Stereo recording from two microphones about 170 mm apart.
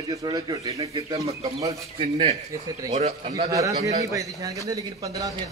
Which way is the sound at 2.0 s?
35° right (ahead or behind).